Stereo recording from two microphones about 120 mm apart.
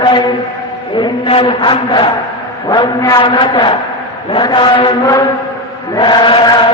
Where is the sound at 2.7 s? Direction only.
30° left (ahead or behind).